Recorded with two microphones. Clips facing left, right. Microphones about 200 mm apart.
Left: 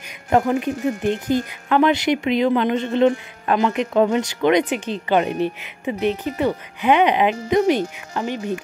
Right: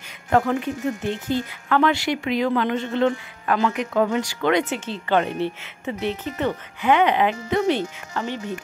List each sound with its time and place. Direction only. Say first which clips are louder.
0.3 s a woman's voice: left 2 dB; 15° left (ahead or behind)